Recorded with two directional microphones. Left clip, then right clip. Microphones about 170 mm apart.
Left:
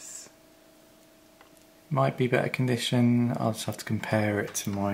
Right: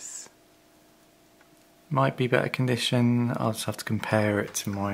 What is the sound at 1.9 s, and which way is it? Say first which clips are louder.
Speech: right 1 dB; 35° right (ahead or behind).